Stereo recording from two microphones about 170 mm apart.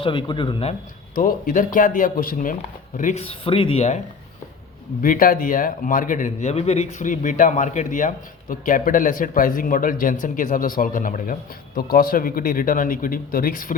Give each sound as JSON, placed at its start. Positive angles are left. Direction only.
{"t": 0.0, "sound": "speech", "side_deg": 30}
{"t": 1.1, "sound": "a man's voice", "side_deg": 55}
{"t": 3.2, "sound": "speech", "side_deg": 30}
{"t": 5.0, "sound": "a man's voice", "side_deg": 55}